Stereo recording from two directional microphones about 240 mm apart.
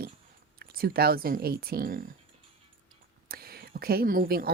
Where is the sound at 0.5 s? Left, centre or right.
Right.